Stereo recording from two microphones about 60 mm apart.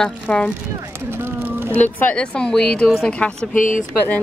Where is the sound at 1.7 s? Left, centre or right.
Left.